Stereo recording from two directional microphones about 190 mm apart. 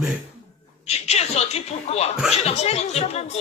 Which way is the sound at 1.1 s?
35° left (ahead or behind).